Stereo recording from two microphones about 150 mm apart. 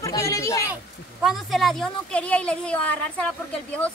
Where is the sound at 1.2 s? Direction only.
Centre (ahead or behind).